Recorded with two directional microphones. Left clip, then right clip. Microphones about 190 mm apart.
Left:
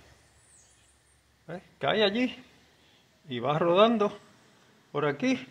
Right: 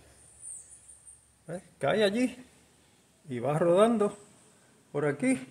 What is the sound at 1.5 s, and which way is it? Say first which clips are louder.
Speech: even; 25° right (ahead or behind).